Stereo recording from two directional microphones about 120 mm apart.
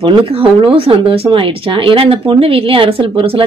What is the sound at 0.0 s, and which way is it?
Speech, 50° right (ahead or behind).